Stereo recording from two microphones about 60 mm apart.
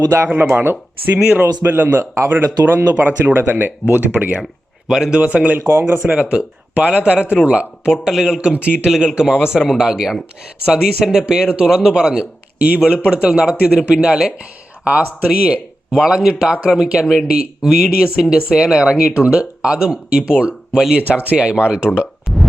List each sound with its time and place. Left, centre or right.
0.5 s speech: right
1.2 s speech: right
4.9 s speech: centre
8.0 s speech: centre
8.4 s speech: centre
8.9 s speech: centre